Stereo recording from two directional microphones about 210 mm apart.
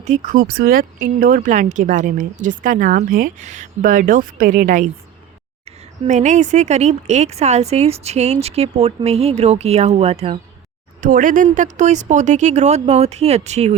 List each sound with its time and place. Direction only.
0.0 s a woman's voice: 35° right (ahead or behind)
11.0 s a woman's voice: 40° right (ahead or behind)